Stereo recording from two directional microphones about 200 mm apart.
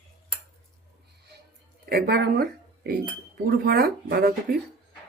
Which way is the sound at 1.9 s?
50° right (ahead or behind).